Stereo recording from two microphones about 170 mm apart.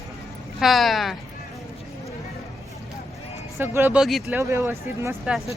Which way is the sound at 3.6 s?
15° right (ahead or behind).